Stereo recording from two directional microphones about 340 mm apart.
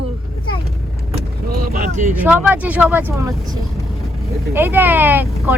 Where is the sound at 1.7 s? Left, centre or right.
Right.